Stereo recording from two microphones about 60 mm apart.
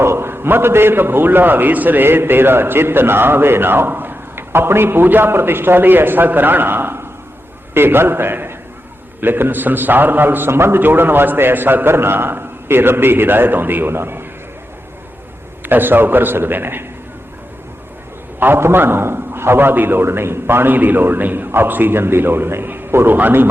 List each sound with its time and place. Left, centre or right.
0.0 s a man's voice: right
15.6 s a man's voice: right
18.3 s a man's voice: right